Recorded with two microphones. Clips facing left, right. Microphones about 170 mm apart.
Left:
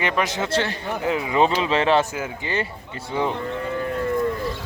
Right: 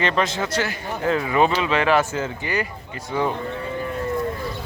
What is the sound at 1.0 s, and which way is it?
Speech, 15° left (ahead or behind).